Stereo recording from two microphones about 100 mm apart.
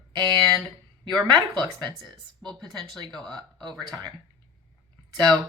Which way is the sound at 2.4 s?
5° left (ahead or behind).